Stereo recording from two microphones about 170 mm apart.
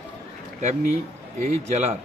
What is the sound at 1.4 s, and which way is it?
Speech, 40° right (ahead or behind).